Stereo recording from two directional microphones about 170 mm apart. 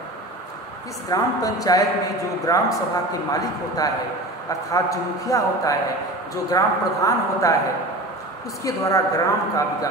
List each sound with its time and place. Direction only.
1.0 s a man's voice: 20° left (ahead or behind)
8.6 s a man's voice: 20° left (ahead or behind)